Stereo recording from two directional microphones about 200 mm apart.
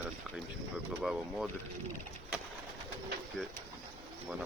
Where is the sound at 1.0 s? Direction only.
Centre (ahead or behind).